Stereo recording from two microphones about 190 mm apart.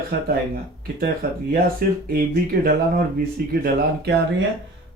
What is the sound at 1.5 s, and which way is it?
Speech, 50° right (ahead or behind).